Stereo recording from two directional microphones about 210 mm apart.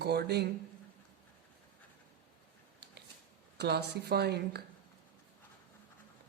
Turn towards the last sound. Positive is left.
turn(degrees=-50)  # may be behind; listen again after turning